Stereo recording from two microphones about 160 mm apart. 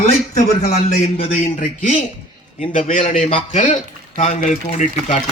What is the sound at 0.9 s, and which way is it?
Speech, 45° left (ahead or behind).